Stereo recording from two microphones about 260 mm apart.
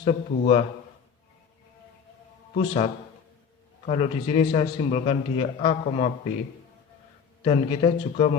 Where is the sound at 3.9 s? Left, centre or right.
Left.